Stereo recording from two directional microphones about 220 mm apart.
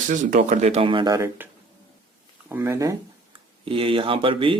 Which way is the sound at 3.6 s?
25° right (ahead or behind).